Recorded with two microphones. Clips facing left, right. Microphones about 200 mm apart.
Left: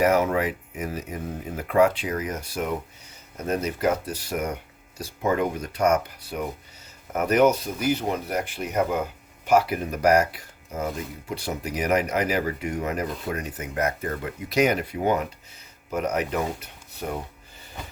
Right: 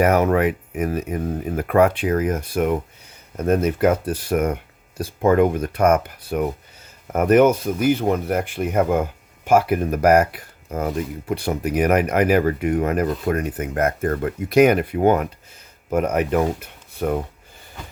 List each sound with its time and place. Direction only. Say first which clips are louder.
0.0 s speech: right 4 dB; 60° right (ahead or behind)